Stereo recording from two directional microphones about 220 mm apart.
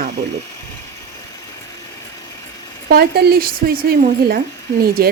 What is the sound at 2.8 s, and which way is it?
Speech, 45° right (ahead or behind).